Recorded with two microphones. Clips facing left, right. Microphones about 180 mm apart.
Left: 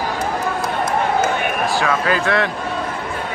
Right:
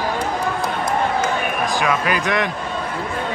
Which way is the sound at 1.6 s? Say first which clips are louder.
Left 1 dB; 15° right (ahead or behind).